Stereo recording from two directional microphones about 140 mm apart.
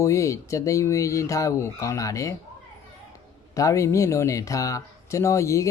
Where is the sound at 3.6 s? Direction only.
20° left (ahead or behind).